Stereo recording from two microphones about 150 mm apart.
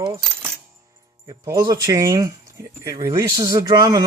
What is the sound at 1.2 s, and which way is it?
Speech, 25° right (ahead or behind).